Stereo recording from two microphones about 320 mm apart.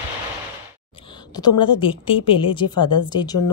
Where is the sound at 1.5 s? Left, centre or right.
Left.